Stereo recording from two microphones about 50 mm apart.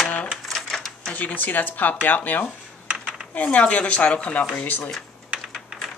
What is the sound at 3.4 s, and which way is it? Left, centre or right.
Speech, left.